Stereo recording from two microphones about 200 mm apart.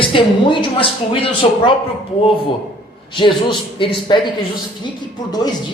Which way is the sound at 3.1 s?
25° left (ahead or behind).